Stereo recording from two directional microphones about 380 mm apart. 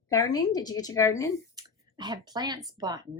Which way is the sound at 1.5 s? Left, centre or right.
Centre.